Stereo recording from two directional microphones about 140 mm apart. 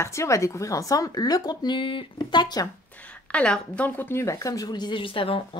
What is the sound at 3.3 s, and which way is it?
A woman's voice, 10° left (ahead or behind).